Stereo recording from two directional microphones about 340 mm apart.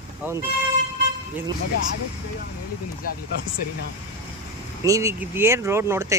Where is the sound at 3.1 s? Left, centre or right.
Left.